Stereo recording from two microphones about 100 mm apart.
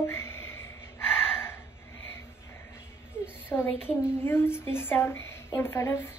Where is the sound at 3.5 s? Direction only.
20° left (ahead or behind).